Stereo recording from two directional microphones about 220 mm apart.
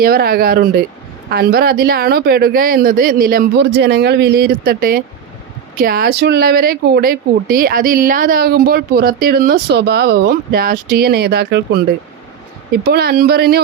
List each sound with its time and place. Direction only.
0.0 s speech: 45° right (ahead or behind)
12.8 s speech: 45° right (ahead or behind)